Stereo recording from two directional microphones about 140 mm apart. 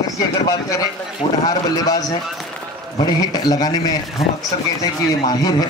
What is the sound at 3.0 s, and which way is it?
Speech, 25° left (ahead or behind).